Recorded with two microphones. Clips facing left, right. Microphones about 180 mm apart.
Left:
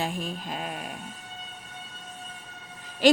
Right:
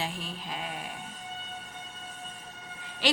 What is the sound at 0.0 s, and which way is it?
Speech, 45° left (ahead or behind).